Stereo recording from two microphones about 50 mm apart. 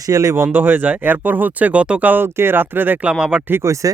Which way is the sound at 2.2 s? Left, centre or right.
Right.